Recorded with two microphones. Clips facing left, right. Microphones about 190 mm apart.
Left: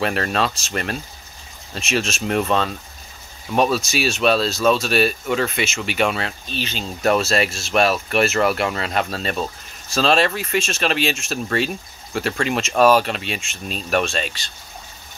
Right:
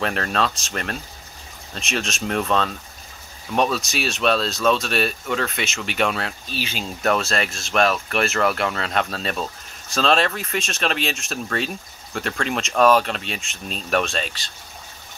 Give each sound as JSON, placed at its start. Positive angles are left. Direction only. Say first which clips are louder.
{"t": 0.0, "sound": "speech", "louder": "left 2 dB", "side_deg": 5}
{"t": 7.1, "sound": "speech", "louder": "left 4 dB", "side_deg": 5}